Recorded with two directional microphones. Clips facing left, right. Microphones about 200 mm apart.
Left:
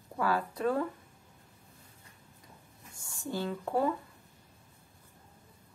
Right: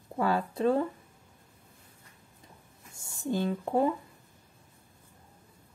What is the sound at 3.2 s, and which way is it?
Speech, 20° right (ahead or behind).